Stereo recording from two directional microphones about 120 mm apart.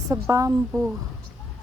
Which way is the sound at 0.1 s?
25° right (ahead or behind).